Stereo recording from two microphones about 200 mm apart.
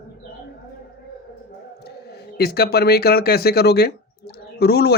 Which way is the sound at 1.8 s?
55° left (ahead or behind).